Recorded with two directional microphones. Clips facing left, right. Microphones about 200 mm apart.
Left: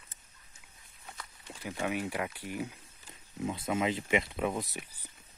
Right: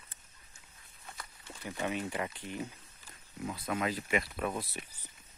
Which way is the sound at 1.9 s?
10° left (ahead or behind).